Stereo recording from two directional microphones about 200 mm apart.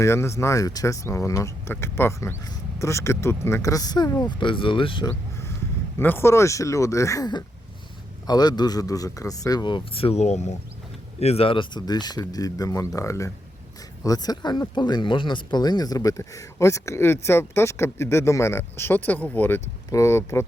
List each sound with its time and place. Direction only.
0.0 s speech: 15° left (ahead or behind)
6.0 s a man's voice: 10° left (ahead or behind)